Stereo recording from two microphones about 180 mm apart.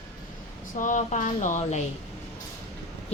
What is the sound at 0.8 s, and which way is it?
Speech, 45° left (ahead or behind).